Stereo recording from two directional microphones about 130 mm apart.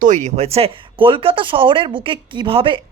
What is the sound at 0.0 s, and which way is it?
Speech, 65° right (ahead or behind).